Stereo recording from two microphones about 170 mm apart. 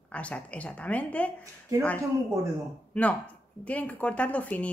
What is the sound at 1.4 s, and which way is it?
Speech, 20° right (ahead or behind).